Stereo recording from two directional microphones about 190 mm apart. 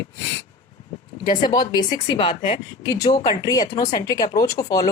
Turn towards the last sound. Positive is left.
turn(degrees=20)  # may be behind; listen again after turning